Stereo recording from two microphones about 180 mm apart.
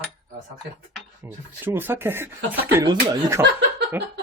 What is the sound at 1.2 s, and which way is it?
Speech, 10° right (ahead or behind).